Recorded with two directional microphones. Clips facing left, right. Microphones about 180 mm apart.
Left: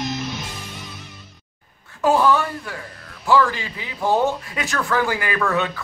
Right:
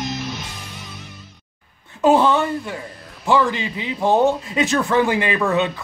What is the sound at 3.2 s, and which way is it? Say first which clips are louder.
A man's voice: even; 20° right (ahead or behind).